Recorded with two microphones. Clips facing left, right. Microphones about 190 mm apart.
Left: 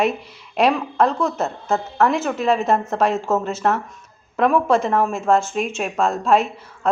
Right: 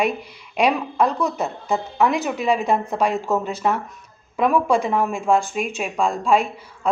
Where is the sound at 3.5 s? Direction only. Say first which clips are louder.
Left 1 dB; 10° right (ahead or behind).